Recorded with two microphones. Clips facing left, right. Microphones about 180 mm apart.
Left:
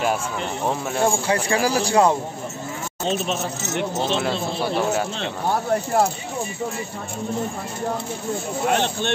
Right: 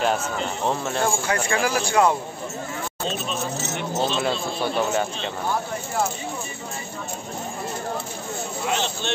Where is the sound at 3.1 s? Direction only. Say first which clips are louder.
Left 5 dB; 70° left (ahead or behind).